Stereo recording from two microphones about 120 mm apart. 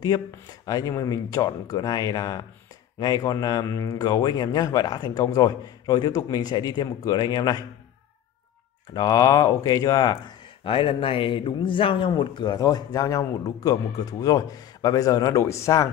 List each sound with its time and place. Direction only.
0.0 s speech: 35° left (ahead or behind)
8.9 s speech: 30° left (ahead or behind)